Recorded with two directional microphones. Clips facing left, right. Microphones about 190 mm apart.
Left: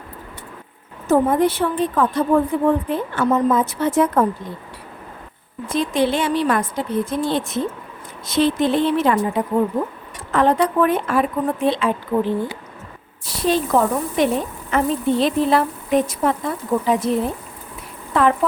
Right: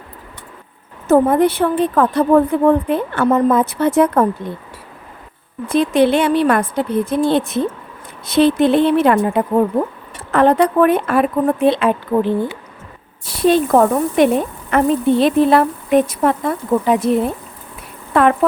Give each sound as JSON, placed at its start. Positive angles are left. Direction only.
{"t": 1.0, "sound": "speech", "side_deg": -60}
{"t": 5.6, "sound": "speech", "side_deg": -60}
{"t": 13.4, "sound": "speech", "side_deg": -55}
{"t": 18.1, "sound": "speech", "side_deg": -60}